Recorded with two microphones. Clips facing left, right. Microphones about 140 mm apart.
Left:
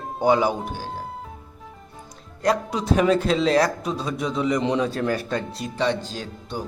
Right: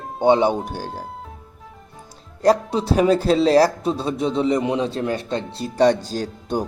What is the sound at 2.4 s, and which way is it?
A man's voice, 35° right (ahead or behind).